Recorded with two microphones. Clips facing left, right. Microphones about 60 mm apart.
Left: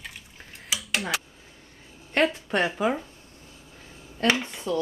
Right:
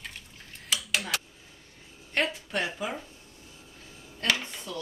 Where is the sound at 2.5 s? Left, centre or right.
Left.